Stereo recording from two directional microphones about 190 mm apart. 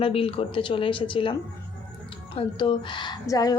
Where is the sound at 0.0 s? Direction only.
30° left (ahead or behind).